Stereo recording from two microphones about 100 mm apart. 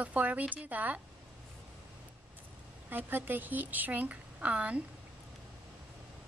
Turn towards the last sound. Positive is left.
turn(degrees=-10)  # may be behind; listen again after turning